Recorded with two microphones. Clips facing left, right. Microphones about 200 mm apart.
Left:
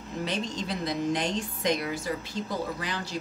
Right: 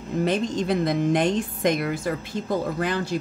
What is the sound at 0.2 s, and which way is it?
A woman's voice, 50° right (ahead or behind).